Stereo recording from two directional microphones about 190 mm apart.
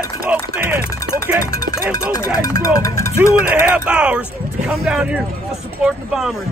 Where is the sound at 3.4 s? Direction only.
10° right (ahead or behind).